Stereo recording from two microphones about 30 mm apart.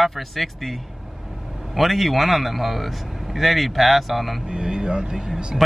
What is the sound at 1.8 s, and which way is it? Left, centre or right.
Speech, centre.